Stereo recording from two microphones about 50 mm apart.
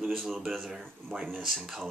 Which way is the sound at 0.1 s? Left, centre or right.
Centre.